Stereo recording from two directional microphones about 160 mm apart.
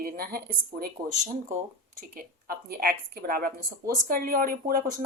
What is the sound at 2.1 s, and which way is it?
A woman's voice, 70° right (ahead or behind).